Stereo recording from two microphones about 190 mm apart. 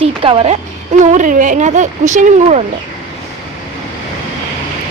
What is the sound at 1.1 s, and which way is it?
Speech, 45° right (ahead or behind).